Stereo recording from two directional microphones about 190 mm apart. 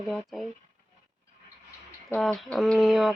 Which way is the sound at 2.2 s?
Centre (ahead or behind).